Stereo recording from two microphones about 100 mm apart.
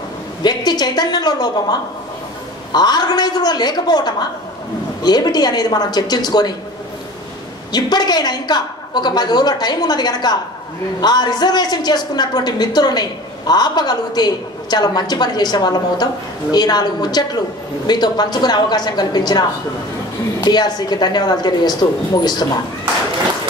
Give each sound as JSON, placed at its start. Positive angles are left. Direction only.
{"t": 0.4, "sound": "a woman's voice", "side_deg": 45}
{"t": 7.7, "sound": "a woman's voice", "side_deg": 45}
{"t": 20.4, "sound": "a woman's voice", "side_deg": 45}